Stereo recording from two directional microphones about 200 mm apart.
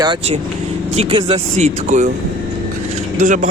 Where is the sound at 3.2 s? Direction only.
40° right (ahead or behind).